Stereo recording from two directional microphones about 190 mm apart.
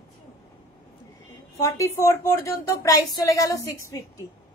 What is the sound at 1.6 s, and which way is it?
A woman's voice, 15° left (ahead or behind).